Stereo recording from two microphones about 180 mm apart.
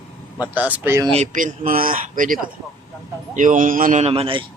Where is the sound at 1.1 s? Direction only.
40° right (ahead or behind).